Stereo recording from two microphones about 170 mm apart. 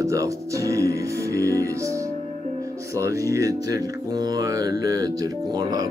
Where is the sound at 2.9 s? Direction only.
20° right (ahead or behind).